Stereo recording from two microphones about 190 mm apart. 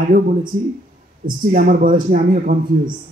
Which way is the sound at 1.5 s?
45° right (ahead or behind).